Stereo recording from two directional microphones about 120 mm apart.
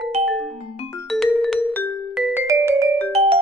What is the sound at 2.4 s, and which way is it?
Music, 25° right (ahead or behind).